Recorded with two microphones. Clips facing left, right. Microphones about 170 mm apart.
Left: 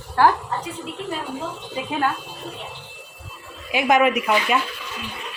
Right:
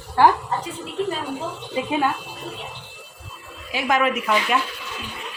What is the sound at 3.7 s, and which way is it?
Speech, 15° left (ahead or behind).